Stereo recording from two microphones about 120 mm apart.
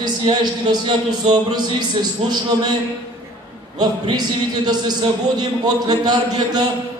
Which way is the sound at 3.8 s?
35° right (ahead or behind).